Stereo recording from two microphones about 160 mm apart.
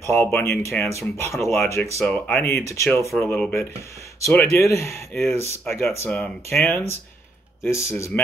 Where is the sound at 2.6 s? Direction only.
20° left (ahead or behind).